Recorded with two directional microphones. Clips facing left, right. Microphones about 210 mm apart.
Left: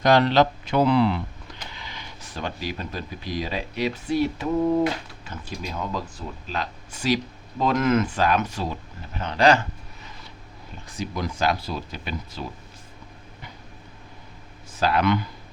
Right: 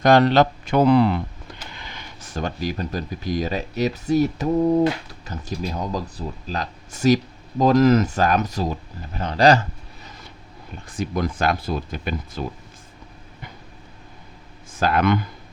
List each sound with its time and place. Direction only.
0.0 s speech: 45° right (ahead or behind)
10.8 s speech: 55° right (ahead or behind)
14.7 s speech: 50° right (ahead or behind)